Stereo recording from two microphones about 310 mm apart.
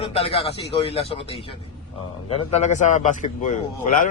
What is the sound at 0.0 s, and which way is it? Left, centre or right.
Speech, centre.